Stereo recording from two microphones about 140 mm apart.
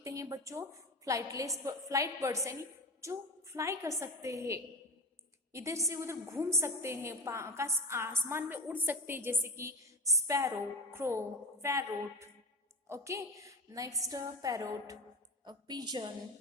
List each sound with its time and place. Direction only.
0.0 s a woman's voice: 20° right (ahead or behind)